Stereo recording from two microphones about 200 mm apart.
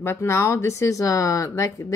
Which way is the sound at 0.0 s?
10° left (ahead or behind).